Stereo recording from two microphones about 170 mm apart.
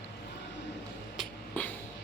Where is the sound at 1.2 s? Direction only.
10° left (ahead or behind).